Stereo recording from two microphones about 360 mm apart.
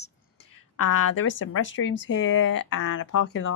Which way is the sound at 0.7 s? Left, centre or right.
Left.